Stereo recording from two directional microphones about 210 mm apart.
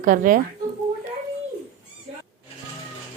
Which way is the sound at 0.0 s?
40° right (ahead or behind).